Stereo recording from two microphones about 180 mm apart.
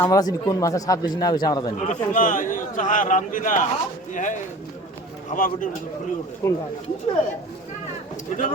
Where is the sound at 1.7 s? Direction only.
40° left (ahead or behind).